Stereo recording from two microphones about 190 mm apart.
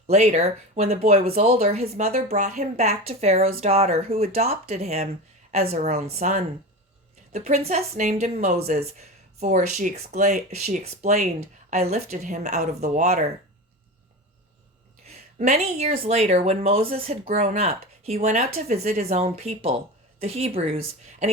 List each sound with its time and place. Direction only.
0.1 s a woman's voice: 35° right (ahead or behind)
12.5 s speech: 50° right (ahead or behind)
13.0 s a woman's voice: 35° right (ahead or behind)
15.0 s a woman's voice: 35° right (ahead or behind)